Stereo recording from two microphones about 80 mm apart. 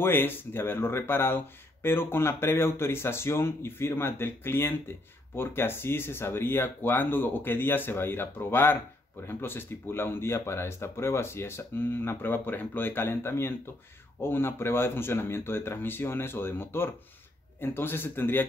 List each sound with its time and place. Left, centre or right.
0.0 s speech: left